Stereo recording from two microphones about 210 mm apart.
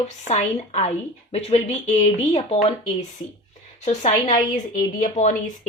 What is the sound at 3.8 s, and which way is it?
A woman's voice, 35° left (ahead or behind).